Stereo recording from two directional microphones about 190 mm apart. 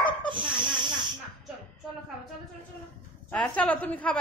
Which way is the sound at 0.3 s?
25° right (ahead or behind).